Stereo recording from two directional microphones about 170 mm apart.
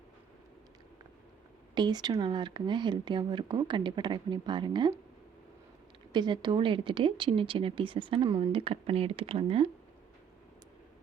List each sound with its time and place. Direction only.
1.7 s speech: 25° right (ahead or behind)
6.1 s speech: 25° right (ahead or behind)